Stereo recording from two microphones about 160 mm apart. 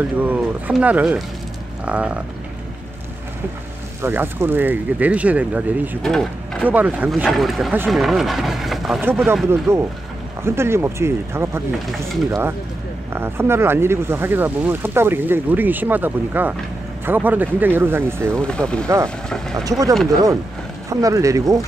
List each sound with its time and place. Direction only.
0.2 s speech: 10° right (ahead or behind)
4.0 s speech: 15° right (ahead or behind)
6.0 s speech: 5° left (ahead or behind)
6.7 s speech: 10° right (ahead or behind)
9.0 s speech: 10° right (ahead or behind)
18.3 s speech: 5° left (ahead or behind)
20.9 s speech: 20° right (ahead or behind)